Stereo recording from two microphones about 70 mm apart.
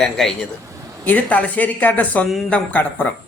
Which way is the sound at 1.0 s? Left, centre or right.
Left.